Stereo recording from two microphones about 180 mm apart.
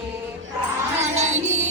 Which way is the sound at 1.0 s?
40° right (ahead or behind).